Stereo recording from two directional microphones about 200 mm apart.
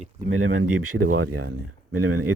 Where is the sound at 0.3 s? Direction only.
90° right.